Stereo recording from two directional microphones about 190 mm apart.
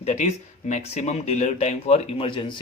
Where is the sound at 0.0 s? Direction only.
35° left (ahead or behind).